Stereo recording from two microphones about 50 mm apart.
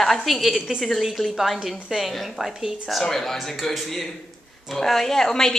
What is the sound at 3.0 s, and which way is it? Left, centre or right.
A woman's voice, centre.